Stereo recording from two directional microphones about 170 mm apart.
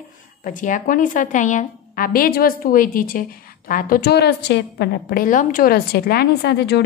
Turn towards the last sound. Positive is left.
turn(degrees=75)  # may be behind; listen again after turning